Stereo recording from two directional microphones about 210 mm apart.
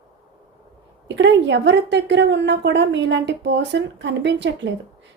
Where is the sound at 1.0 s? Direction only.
60° right (ahead or behind).